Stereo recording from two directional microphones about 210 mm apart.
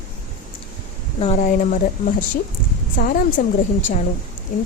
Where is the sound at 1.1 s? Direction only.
30° left (ahead or behind).